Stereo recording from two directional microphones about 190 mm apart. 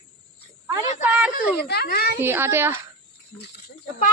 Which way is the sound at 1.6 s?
55° left (ahead or behind).